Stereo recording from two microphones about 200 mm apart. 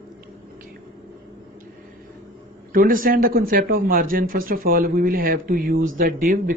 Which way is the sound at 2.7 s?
45° right (ahead or behind).